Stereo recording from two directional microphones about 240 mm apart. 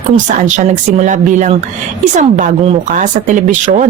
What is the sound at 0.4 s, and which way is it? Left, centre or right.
A woman's voice, right.